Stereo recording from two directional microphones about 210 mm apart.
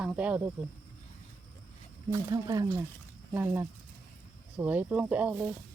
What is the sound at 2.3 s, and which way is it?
Speech, 15° right (ahead or behind).